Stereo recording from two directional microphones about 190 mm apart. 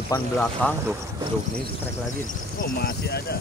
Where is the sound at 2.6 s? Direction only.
50° left (ahead or behind).